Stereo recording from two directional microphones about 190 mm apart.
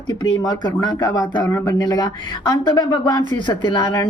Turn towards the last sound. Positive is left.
turn(degrees=20)  # may be behind; listen again after turning